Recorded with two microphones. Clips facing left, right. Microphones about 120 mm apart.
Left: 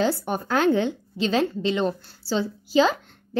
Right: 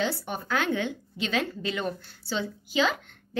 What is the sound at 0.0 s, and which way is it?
A woman's voice, 45° left (ahead or behind).